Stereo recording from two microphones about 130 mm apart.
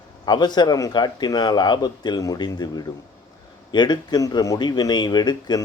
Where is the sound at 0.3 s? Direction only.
35° left (ahead or behind).